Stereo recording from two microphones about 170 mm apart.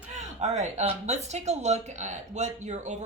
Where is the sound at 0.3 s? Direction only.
40° right (ahead or behind).